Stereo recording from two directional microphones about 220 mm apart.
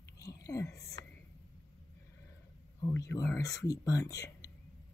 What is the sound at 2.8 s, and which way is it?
Speech, 15° left (ahead or behind).